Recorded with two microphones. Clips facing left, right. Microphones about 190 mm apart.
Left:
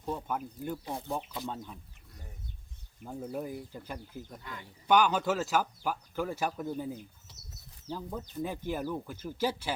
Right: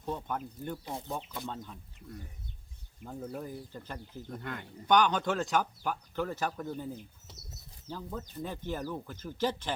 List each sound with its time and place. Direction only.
0.0 s speech: 5° left (ahead or behind)
3.0 s speech: 10° left (ahead or behind)
4.4 s speech: 55° right (ahead or behind)
4.9 s speech: 5° left (ahead or behind)